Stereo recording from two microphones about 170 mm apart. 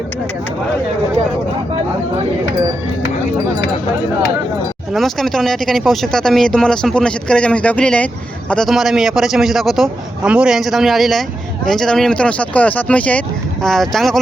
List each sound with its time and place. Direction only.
4.9 s speech: centre (ahead or behind)